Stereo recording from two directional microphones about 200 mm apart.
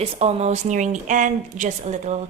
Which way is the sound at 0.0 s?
30° right (ahead or behind).